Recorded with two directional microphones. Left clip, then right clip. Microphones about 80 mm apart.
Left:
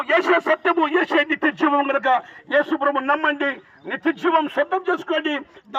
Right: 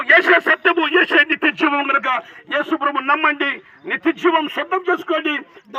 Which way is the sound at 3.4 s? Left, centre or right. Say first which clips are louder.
Right 3 dB; right.